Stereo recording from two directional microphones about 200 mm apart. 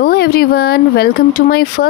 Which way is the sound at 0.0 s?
50° left (ahead or behind).